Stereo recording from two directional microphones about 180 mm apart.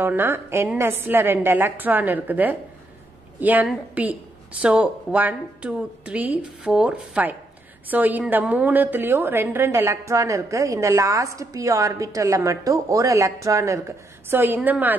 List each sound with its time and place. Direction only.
0.0 s a woman's voice: 10° right (ahead or behind)